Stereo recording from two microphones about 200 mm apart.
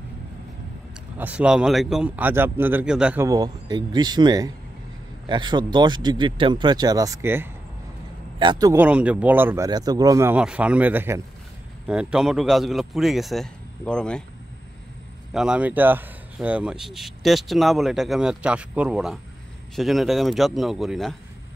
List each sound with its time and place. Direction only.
1.1 s speech: 10° right (ahead or behind)
3.3 s speech: 20° right (ahead or behind)
8.7 s a man's voice: 5° right (ahead or behind)
15.3 s a man's voice: 5° right (ahead or behind)